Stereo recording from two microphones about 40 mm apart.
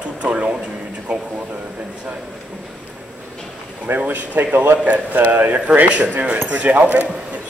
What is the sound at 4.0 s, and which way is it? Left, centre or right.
Speech, right.